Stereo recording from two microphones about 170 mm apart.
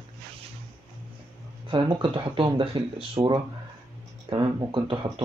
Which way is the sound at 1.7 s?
30° right (ahead or behind).